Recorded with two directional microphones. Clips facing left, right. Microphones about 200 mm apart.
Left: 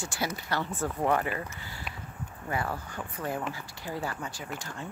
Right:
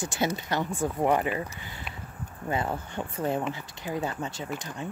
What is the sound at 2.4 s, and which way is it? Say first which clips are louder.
Speech: right 3 dB; 20° right (ahead or behind).